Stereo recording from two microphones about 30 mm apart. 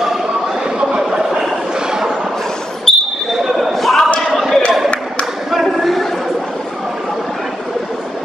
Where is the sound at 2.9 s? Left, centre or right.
Centre.